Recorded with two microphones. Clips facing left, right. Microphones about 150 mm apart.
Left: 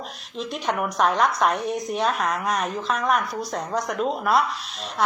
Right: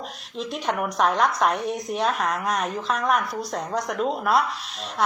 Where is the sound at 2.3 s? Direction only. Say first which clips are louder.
Left 1 dB; 45° right (ahead or behind).